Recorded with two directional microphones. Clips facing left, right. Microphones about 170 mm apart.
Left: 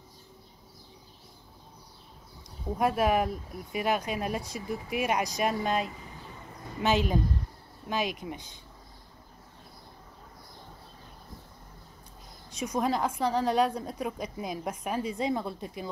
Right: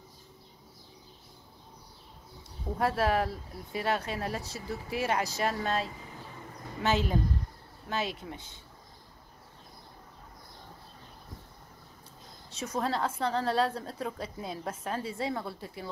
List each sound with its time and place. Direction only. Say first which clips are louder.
2.8 s a woman's voice: left 2 dB; 15° left (ahead or behind)
12.4 s a woman's voice: left 3 dB; 15° left (ahead or behind)